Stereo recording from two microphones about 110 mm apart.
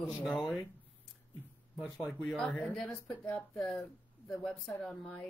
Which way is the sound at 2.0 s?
10° left (ahead or behind).